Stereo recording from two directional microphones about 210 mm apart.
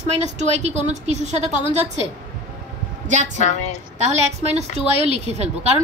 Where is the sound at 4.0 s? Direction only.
30° right (ahead or behind).